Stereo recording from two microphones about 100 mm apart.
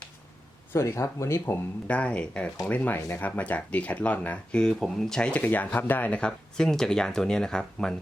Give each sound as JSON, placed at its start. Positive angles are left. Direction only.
{"t": 0.7, "sound": "speech", "side_deg": 30}
{"t": 1.9, "sound": "speech", "side_deg": 10}